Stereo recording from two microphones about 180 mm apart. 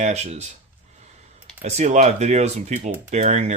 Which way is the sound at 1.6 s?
40° right (ahead or behind).